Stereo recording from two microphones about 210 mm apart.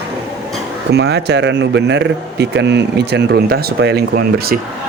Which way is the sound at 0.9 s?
50° right (ahead or behind).